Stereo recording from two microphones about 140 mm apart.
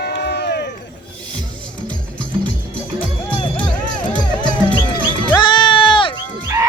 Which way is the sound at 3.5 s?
10° left (ahead or behind).